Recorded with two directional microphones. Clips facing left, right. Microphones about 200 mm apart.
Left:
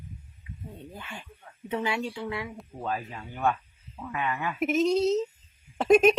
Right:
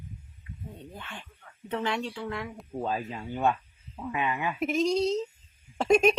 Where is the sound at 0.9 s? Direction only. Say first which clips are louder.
Left 1 dB; 10° left (ahead or behind).